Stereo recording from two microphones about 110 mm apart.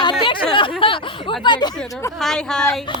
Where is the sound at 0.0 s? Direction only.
50° left (ahead or behind).